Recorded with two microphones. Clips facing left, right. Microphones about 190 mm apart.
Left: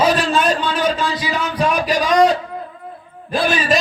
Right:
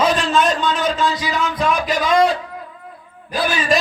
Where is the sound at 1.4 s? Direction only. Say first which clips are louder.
Left 2 dB; 35° left (ahead or behind).